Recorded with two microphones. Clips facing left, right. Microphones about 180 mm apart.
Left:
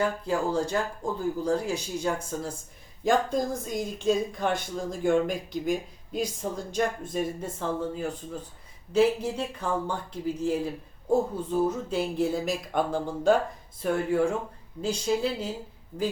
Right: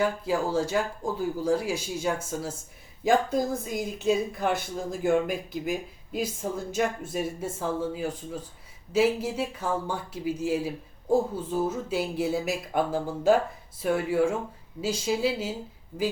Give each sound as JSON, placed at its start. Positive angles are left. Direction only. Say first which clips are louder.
{"t": 0.0, "sound": "speech", "louder": "right 1 dB", "side_deg": -5}